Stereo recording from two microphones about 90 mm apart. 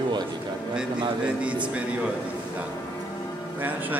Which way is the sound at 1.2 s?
15° right (ahead or behind).